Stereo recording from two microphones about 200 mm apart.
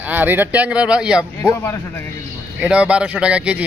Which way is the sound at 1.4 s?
10° left (ahead or behind).